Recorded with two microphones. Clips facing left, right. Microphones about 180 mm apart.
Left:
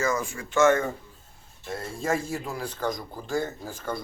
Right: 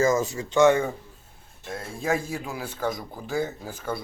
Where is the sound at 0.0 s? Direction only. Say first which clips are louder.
Right 5 dB; 25° right (ahead or behind).